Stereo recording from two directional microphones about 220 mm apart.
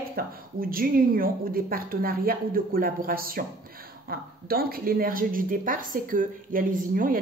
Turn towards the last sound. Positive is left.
turn(degrees=-40)  # may be behind; listen again after turning